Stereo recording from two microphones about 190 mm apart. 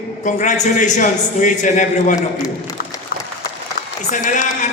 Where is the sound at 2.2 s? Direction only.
20° left (ahead or behind).